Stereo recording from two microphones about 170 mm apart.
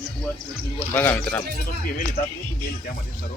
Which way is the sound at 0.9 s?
10° left (ahead or behind).